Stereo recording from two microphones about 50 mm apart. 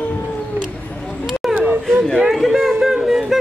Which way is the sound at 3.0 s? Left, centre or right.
Centre.